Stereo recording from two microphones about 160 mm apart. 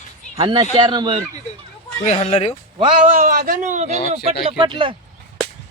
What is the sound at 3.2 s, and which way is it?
Speech, 55° right (ahead or behind).